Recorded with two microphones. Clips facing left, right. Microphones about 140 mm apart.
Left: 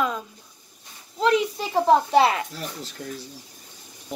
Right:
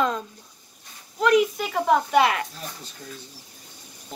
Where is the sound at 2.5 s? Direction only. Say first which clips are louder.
Left 4 dB; 85° left.